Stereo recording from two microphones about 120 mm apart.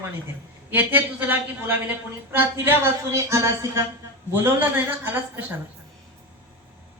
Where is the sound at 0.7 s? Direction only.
15° right (ahead or behind).